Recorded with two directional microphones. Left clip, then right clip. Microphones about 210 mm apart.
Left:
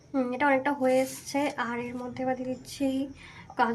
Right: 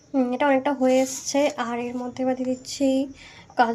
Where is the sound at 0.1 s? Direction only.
15° right (ahead or behind).